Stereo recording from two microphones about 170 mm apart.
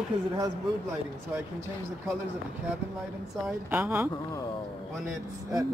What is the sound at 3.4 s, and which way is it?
Speech, 10° right (ahead or behind).